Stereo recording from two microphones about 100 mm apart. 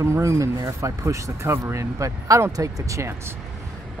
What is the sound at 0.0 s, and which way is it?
Speech, 30° right (ahead or behind).